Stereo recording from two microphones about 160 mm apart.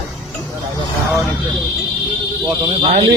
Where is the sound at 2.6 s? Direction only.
30° right (ahead or behind).